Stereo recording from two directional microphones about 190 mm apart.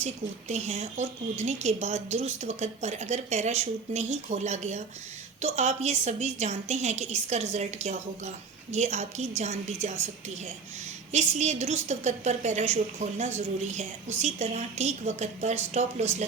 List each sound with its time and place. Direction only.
0.0 s a woman's voice: 35° right (ahead or behind)